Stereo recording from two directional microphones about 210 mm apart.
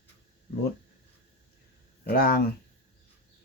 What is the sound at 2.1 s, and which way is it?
Speech, 45° left (ahead or behind).